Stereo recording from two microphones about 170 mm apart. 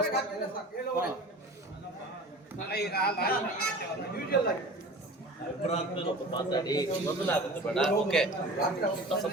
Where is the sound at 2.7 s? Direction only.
70° left (ahead or behind).